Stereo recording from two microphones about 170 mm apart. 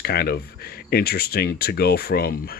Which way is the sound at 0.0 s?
65° left (ahead or behind).